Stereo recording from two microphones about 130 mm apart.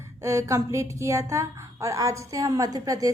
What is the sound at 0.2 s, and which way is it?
A woman's voice, 25° right (ahead or behind).